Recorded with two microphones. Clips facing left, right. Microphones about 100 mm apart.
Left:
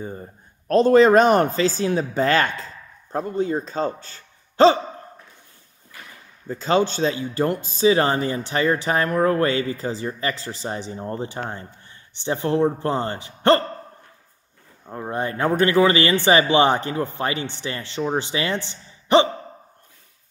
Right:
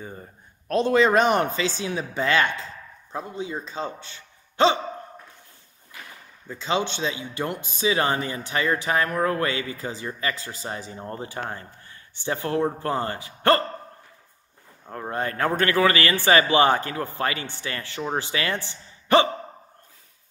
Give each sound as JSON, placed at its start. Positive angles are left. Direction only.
{"t": 0.7, "sound": "speech", "side_deg": 40}
{"t": 6.5, "sound": "a man's voice", "side_deg": 40}
{"t": 14.9, "sound": "a man's voice", "side_deg": 15}